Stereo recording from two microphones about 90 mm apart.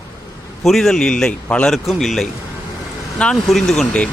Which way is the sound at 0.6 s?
Centre (ahead or behind).